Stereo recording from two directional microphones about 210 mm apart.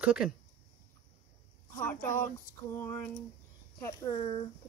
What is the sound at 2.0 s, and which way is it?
Speech, 40° left (ahead or behind).